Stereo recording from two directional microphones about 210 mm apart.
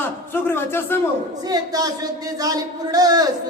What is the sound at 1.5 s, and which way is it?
Speech, 20° right (ahead or behind).